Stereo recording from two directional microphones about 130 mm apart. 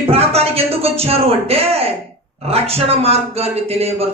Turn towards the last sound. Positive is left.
turn(degrees=-50)  # may be behind; listen again after turning